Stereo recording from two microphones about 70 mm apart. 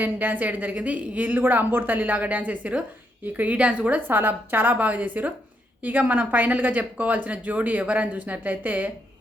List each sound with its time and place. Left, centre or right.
0.0 s speech: right